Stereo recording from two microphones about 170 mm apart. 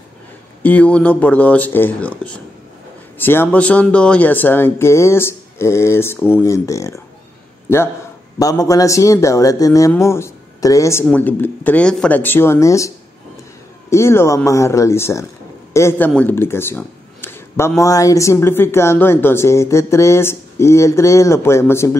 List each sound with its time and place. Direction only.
0.6 s speech: 10° left (ahead or behind)
8.4 s a man's voice: 20° left (ahead or behind)